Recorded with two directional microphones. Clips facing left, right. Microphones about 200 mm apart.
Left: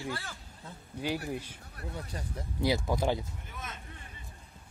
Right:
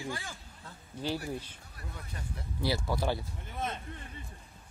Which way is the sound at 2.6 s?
20° left (ahead or behind).